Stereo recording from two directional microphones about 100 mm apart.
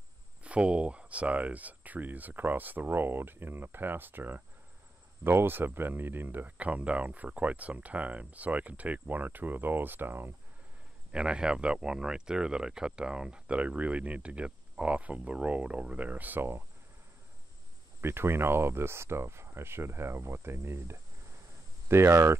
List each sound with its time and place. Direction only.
0.4 s speech: 10° right (ahead or behind)
11.1 s speech: 10° right (ahead or behind)
18.0 s speech: 25° right (ahead or behind)